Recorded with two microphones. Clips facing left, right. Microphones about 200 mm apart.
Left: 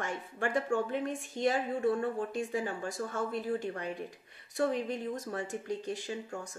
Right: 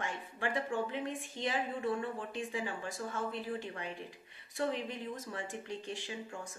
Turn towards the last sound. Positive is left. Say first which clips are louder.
# left 4 dB
turn(degrees=40)  # may be behind; listen again after turning